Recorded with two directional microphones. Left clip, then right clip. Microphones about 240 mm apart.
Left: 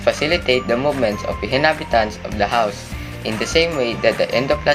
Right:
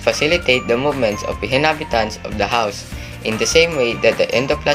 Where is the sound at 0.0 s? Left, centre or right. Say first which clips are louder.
Right 2 dB; right.